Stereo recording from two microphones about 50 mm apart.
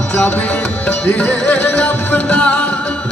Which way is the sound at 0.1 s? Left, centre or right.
Left.